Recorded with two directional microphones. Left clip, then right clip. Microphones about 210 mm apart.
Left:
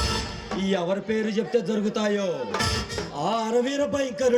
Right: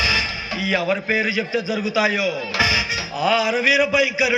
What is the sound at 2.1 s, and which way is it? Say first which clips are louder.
Speech: right 5 dB; 25° left (ahead or behind).